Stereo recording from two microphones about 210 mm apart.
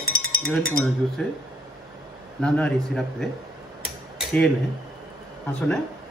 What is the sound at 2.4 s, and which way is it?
Speech, 5° left (ahead or behind).